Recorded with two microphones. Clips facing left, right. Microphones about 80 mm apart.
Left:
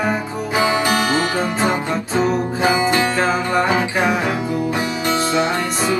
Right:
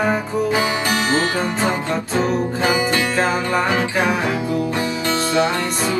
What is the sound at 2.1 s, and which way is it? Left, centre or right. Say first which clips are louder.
Music: left 2 dB; left.